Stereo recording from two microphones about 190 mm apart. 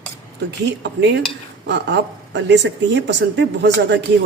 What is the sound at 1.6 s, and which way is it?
A woman's voice, 70° right (ahead or behind).